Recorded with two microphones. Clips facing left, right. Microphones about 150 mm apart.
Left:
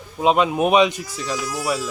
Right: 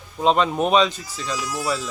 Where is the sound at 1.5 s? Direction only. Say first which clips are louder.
Even; centre (ahead or behind).